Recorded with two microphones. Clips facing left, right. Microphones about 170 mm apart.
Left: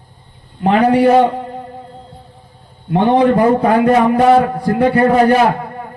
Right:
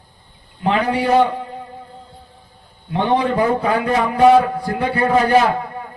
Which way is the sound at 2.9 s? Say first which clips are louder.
Left 6 dB; 50° left (ahead or behind).